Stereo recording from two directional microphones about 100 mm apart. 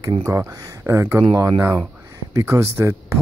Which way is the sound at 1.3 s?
40° right (ahead or behind).